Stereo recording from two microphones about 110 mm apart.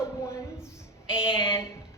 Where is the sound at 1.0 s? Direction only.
10° right (ahead or behind).